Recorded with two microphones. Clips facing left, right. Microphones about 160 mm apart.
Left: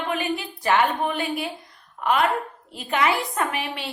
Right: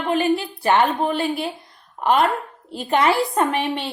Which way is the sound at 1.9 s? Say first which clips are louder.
Right 4 dB; 30° right (ahead or behind).